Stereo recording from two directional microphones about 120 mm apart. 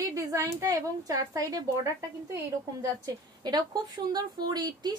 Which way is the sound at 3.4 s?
35° right (ahead or behind).